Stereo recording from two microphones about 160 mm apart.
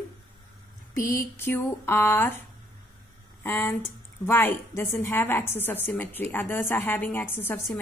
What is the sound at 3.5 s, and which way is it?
A woman's voice, 10° left (ahead or behind).